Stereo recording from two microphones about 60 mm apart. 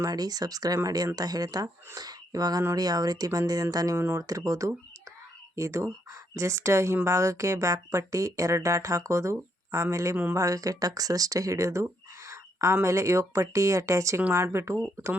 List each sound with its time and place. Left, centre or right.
0.0 s speech: right
3.9 s speech: right
4.2 s speech: right
5.5 s speech: right
14.3 s speech: right